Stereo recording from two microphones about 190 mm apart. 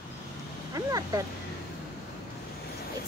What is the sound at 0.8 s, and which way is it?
Speech, 20° right (ahead or behind).